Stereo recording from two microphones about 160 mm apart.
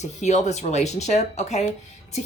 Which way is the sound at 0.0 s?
45° left (ahead or behind).